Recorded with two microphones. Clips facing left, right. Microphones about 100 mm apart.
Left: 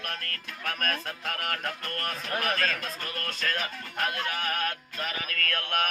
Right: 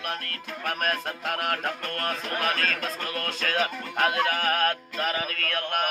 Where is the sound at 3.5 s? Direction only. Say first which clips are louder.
Right 6 dB; 90° right.